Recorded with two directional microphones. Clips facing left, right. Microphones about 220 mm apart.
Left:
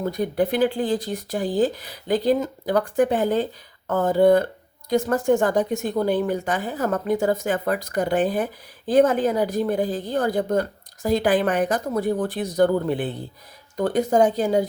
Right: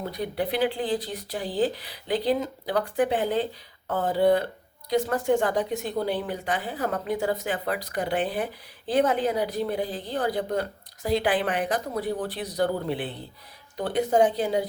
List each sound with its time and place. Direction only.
0.0 s a woman's voice: 45° left (ahead or behind)